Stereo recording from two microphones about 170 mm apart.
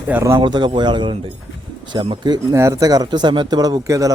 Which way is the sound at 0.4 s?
30° right (ahead or behind).